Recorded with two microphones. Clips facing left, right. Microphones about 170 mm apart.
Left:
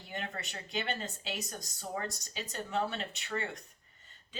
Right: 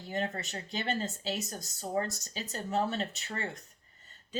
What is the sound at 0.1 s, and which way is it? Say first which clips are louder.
Speech: right 6 dB; 35° right (ahead or behind).